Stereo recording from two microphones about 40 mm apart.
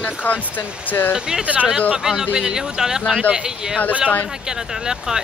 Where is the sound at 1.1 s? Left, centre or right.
Centre.